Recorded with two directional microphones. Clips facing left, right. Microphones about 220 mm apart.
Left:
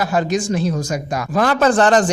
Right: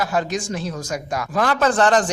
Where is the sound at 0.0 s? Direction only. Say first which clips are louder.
Left 4 dB; 20° left (ahead or behind).